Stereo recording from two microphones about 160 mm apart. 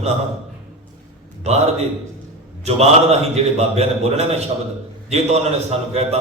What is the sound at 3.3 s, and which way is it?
Speech, 40° right (ahead or behind).